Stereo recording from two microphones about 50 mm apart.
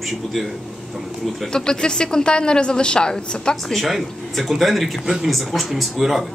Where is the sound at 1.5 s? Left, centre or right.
Centre.